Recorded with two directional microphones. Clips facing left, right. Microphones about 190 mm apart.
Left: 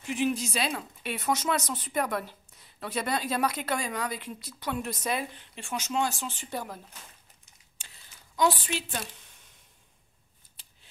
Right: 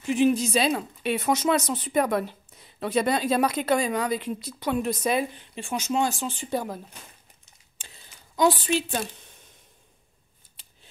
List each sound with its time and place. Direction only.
0.2 s speech: 25° right (ahead or behind)
8.4 s speech: 25° right (ahead or behind)